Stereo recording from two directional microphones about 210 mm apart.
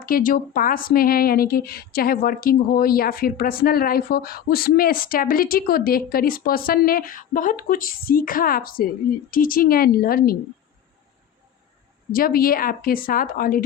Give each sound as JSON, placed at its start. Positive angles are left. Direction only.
{"t": 0.0, "sound": "speech", "side_deg": 40}
{"t": 12.1, "sound": "speech", "side_deg": 45}